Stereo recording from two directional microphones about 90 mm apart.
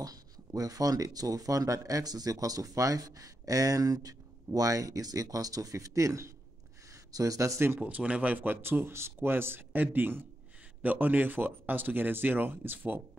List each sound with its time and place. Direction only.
0.0 s speech: 45° right (ahead or behind)
7.8 s a man's voice: 15° right (ahead or behind)